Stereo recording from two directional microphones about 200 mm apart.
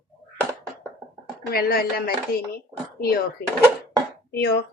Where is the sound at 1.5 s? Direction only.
50° left (ahead or behind).